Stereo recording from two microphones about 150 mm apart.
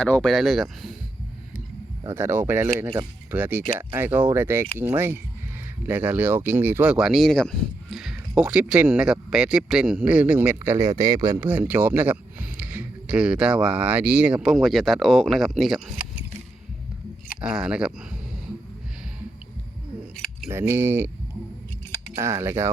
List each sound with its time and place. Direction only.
0.0 s speech: 5° left (ahead or behind)
2.0 s speech: 15° right (ahead or behind)
11.3 s speech: 10° right (ahead or behind)
17.4 s speech: 5° right (ahead or behind)
20.1 s scissors: 5° left (ahead or behind)
20.5 s speech: 15° right (ahead or behind)
22.2 s speech: 20° right (ahead or behind)